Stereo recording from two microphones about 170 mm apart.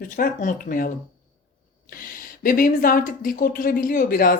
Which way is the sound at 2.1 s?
55° left (ahead or behind).